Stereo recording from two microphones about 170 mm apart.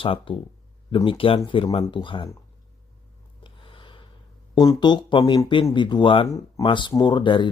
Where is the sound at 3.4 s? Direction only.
30° left (ahead or behind).